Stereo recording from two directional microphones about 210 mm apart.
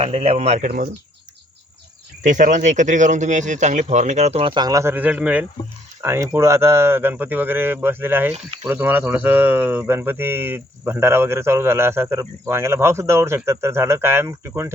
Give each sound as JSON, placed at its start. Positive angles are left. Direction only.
{"t": 0.0, "sound": "a man's voice", "side_deg": -30}
{"t": 2.2, "sound": "a man's voice", "side_deg": -35}